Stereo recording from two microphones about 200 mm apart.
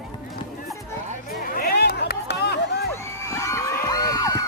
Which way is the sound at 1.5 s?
50° left (ahead or behind).